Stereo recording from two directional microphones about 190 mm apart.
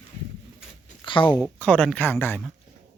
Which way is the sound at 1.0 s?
25° left (ahead or behind).